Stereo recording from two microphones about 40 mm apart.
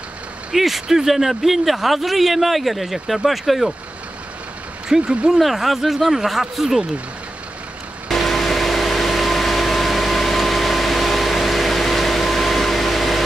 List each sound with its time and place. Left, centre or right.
0.5 s speech: centre
5.0 s speech: right
5.4 s speech: centre
8.1 s vehicle: centre